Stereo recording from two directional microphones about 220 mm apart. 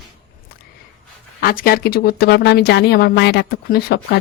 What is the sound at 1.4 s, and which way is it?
A woman's voice, 40° left (ahead or behind).